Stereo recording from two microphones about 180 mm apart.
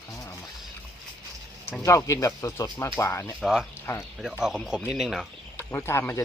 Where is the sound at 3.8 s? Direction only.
15° left (ahead or behind).